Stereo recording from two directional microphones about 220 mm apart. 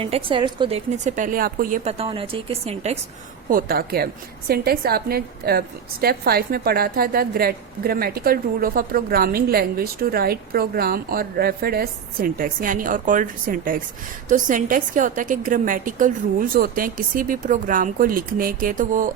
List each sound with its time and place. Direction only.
0.0 s a woman's voice: 25° right (ahead or behind)
1.0 s a woman's voice: 35° right (ahead or behind)
3.5 s a woman's voice: 45° right (ahead or behind)